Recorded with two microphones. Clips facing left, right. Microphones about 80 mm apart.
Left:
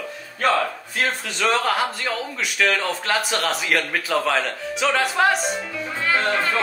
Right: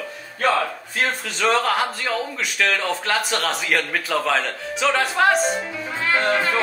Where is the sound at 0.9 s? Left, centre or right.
Centre.